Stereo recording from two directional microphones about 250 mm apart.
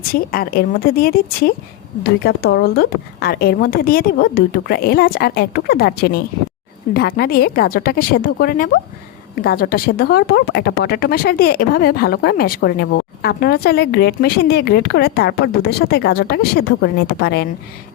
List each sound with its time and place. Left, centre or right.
0.1 s speech: left